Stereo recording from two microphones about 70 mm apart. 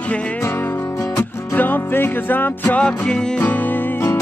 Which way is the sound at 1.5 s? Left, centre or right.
Left.